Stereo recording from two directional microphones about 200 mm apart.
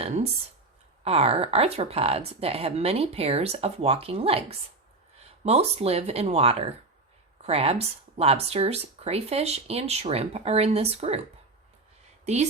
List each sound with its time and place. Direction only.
1.0 s speech: 30° right (ahead or behind)